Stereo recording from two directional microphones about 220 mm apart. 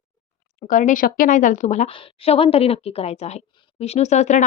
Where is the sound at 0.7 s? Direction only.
35° left (ahead or behind).